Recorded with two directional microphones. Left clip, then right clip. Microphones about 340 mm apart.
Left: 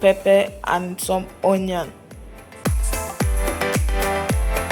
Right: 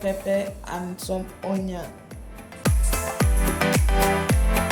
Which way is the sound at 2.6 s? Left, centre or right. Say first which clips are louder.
Even; centre.